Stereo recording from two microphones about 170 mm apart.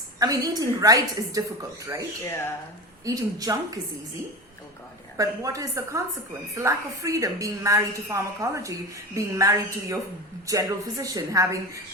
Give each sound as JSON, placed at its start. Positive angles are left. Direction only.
{"t": 0.2, "sound": "a woman's voice", "side_deg": -20}
{"t": 2.2, "sound": "speech", "side_deg": 15}
{"t": 3.0, "sound": "a woman's voice", "side_deg": -20}
{"t": 5.1, "sound": "a woman's voice", "side_deg": -20}